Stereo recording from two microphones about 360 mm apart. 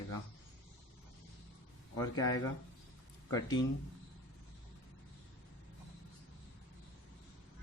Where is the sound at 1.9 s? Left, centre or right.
Centre.